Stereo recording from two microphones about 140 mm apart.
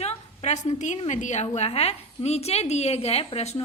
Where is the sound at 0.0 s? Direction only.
50° left (ahead or behind).